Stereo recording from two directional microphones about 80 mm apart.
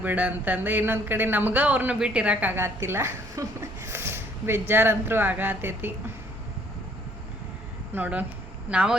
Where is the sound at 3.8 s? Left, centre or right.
Right.